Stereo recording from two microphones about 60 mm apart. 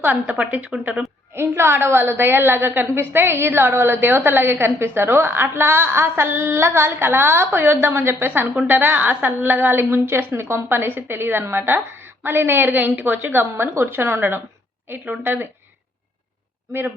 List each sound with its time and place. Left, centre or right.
0.0 s a woman's voice: right
1.4 s a woman's voice: right
8.3 s a woman's voice: right